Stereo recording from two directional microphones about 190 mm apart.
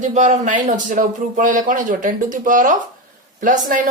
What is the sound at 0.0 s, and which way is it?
A man's voice, 40° right (ahead or behind).